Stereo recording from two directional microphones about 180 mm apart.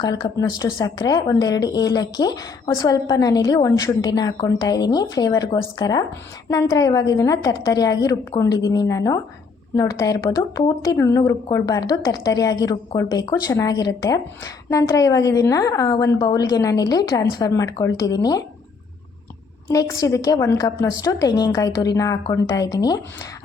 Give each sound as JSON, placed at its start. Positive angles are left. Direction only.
{"t": 0.0, "sound": "a woman's voice", "side_deg": 20}
{"t": 19.6, "sound": "a woman's voice", "side_deg": 20}